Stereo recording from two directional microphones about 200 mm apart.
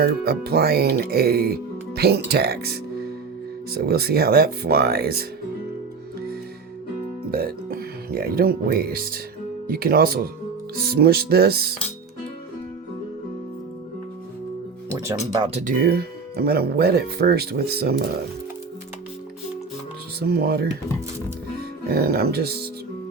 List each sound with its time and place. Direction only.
0.0 s speech: 50° right (ahead or behind)
7.3 s speech: 50° right (ahead or behind)
15.3 s speech: 25° right (ahead or behind)
15.7 s speech: 50° right (ahead or behind)
20.1 s speech: 50° right (ahead or behind)
21.8 s speech: 50° right (ahead or behind)